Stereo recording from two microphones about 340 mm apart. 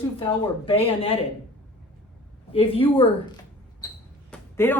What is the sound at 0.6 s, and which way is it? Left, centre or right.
Speech, centre.